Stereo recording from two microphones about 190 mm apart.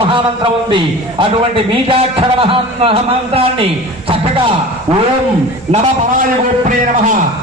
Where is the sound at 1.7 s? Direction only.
30° right (ahead or behind).